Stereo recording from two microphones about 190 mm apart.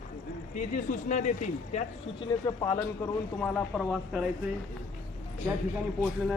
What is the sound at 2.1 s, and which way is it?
Speech, 20° left (ahead or behind).